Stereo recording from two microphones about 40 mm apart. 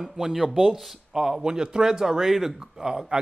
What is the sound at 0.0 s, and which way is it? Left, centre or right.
Speech, centre.